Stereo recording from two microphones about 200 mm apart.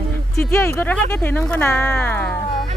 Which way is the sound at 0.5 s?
10° left (ahead or behind).